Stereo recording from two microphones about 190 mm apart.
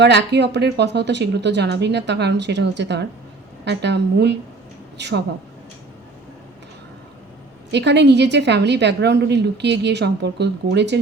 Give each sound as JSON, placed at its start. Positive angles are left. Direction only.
{"t": 0.0, "sound": "a woman's voice", "side_deg": -65}
{"t": 7.7, "sound": "a woman's voice", "side_deg": -65}